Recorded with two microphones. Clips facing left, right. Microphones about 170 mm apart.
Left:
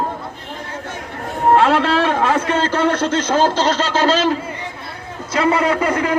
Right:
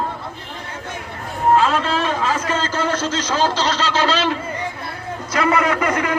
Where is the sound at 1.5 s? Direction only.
65° left (ahead or behind); by 4.3 s 45° left (ahead or behind).